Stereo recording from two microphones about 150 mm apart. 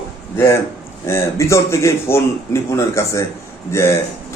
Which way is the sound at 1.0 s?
20° left (ahead or behind).